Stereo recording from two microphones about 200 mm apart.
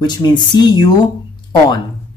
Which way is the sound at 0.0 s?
20° left (ahead or behind).